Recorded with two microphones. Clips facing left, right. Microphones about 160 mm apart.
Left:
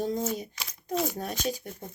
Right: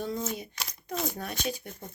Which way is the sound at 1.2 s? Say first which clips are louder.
Left 2 dB; 40° left (ahead or behind).